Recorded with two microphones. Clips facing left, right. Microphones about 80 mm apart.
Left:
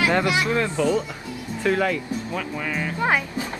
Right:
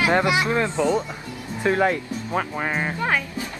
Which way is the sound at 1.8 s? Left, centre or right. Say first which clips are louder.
Right 1 dB; right.